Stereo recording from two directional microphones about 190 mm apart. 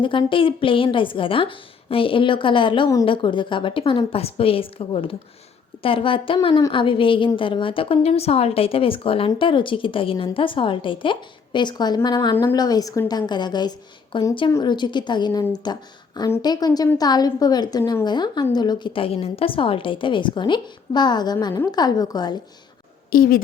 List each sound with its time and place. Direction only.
0.0 s a woman's voice: 25° left (ahead or behind)
23.1 s a woman's voice: 50° left (ahead or behind)